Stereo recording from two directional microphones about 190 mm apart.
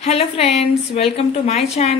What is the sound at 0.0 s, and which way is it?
A woman's voice, 35° left (ahead or behind).